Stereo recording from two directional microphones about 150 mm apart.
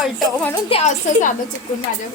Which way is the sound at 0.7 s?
40° left (ahead or behind).